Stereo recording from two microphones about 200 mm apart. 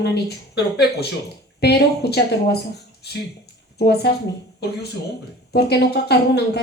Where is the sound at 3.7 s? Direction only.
55° left (ahead or behind).